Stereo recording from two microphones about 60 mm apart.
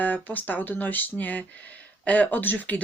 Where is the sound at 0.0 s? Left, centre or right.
Left.